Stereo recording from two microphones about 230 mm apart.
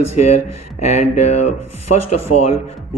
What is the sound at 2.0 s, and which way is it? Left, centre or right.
Speech, left.